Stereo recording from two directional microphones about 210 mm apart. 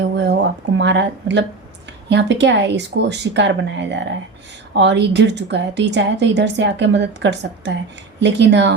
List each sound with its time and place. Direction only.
0.2 s a woman's voice: 55° right (ahead or behind)